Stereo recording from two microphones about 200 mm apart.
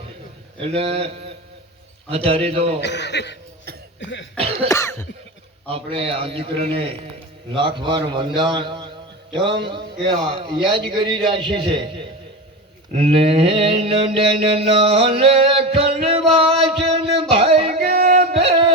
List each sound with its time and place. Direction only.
0.8 s a man's voice: 30° right (ahead or behind)
2.8 s a man's voice: 60° left (ahead or behind)
4.7 s cough: 15° left (ahead or behind)
5.6 s a man's voice: 30° right (ahead or behind)
13.0 s a sound: 30° right (ahead or behind)